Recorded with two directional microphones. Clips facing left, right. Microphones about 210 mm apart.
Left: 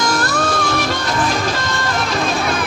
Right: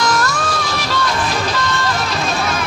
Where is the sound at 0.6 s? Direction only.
50° left (ahead or behind).